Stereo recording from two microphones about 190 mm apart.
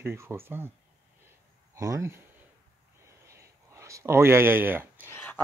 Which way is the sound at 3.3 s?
15° right (ahead or behind).